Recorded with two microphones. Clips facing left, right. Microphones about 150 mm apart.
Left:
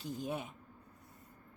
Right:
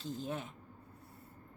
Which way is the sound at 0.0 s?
15° left (ahead or behind).